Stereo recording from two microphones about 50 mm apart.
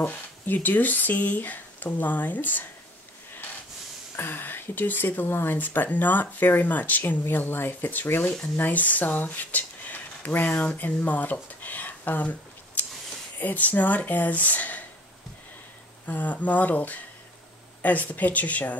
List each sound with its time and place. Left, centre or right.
0.0 s speech: left
4.2 s speech: left
10.4 s speech: centre
10.8 s a sound: left
13.4 s speech: left
16.1 s speech: left